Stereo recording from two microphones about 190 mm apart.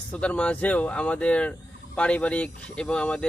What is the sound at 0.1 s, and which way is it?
Speech, 5° left (ahead or behind).